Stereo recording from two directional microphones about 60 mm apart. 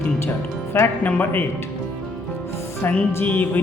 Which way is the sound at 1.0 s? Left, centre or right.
Left.